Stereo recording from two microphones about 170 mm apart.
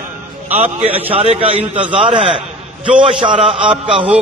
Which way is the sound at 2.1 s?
35° right (ahead or behind).